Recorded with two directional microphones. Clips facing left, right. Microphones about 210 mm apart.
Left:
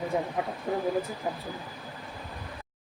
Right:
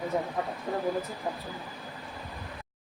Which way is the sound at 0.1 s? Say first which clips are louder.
Left 1 dB; 15° left (ahead or behind).